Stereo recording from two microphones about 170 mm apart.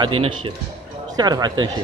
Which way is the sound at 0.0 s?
30° right (ahead or behind).